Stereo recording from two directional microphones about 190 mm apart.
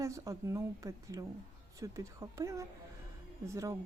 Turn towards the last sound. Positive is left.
turn(degrees=-15)  # may be behind; listen again after turning